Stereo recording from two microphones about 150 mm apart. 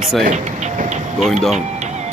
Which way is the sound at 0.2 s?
55° right (ahead or behind).